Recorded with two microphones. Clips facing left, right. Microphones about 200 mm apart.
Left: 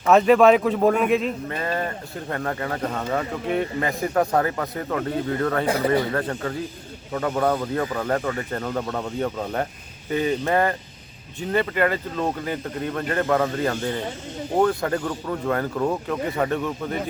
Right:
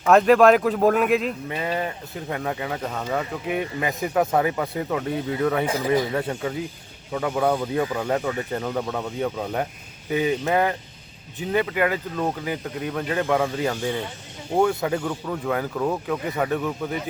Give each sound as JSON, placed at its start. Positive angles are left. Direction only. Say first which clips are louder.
{"t": 0.1, "sound": "speech", "louder": "even", "side_deg": 0}
{"t": 5.6, "sound": "speech", "louder": "left 1 dB", "side_deg": 60}
{"t": 6.0, "sound": "speech", "louder": "even", "side_deg": -10}